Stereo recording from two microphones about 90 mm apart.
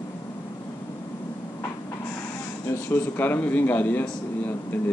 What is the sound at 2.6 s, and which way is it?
A man's voice, 30° left (ahead or behind).